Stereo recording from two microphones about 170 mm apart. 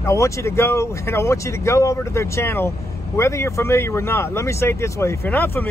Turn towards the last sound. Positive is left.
turn(degrees=10)  # may be behind; listen again after turning